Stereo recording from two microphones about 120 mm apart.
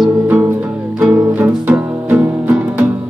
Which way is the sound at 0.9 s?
15° right (ahead or behind).